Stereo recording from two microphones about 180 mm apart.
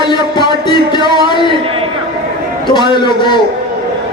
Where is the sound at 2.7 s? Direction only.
25° left (ahead or behind).